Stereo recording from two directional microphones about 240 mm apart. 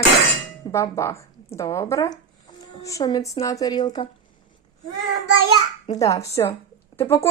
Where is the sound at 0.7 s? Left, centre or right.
Centre.